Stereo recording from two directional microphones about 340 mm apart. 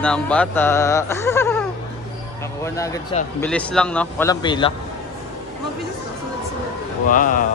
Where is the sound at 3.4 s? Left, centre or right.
Centre.